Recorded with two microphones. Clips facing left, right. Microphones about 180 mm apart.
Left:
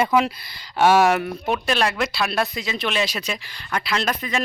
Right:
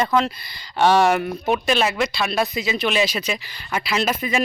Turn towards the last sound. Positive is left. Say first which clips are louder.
# right 3 dB
turn(degrees=-5)  # may be behind; listen again after turning